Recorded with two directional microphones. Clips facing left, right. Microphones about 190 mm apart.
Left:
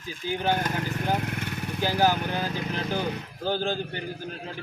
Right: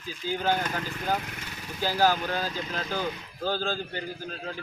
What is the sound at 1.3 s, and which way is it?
Vehicle, 60° left (ahead or behind).